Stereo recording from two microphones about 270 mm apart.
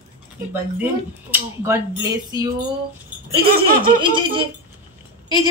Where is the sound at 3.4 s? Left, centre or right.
Right.